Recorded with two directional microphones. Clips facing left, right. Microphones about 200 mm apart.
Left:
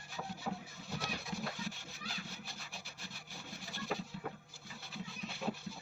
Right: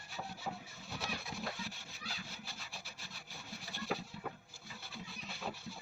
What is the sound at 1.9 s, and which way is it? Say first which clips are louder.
Vehicle: left 2 dB; centre (ahead or behind).